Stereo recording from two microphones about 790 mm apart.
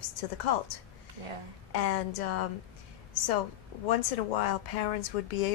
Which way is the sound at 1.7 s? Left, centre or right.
Left.